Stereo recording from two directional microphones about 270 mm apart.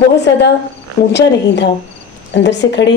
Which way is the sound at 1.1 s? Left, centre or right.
Left.